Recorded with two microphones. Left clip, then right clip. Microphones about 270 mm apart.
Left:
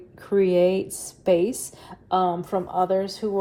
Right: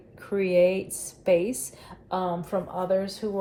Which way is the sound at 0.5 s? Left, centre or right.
Left.